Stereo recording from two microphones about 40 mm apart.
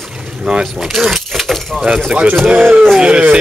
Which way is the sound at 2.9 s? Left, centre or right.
Right.